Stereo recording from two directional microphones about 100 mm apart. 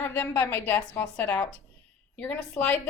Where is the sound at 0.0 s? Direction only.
20° left (ahead or behind).